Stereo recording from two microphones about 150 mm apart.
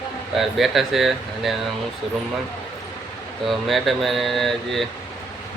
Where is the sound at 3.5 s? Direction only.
Centre (ahead or behind).